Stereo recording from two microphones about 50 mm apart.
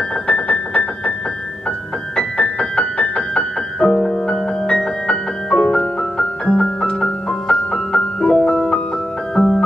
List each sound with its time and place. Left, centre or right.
0.3 s keyboard: left
2.1 s music: centre